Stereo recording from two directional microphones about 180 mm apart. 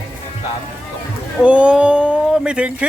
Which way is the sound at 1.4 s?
5° right (ahead or behind).